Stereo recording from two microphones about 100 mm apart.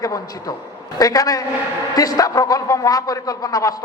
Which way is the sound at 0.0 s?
35° left (ahead or behind).